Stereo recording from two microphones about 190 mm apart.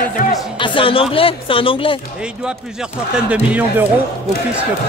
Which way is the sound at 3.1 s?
5° right (ahead or behind).